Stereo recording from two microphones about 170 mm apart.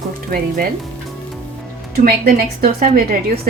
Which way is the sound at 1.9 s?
60° right (ahead or behind).